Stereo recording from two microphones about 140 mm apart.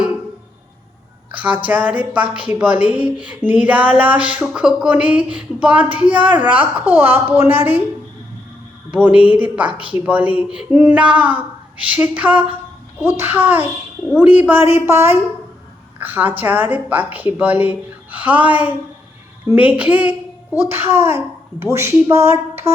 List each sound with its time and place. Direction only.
1.3 s a woman's voice: 10° right (ahead or behind)
8.9 s a woman's voice: 10° right (ahead or behind)